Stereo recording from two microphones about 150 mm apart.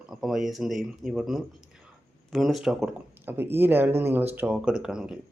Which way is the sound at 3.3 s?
15° right (ahead or behind).